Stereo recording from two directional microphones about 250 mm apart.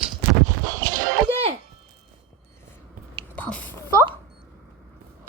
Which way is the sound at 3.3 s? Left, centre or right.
Centre.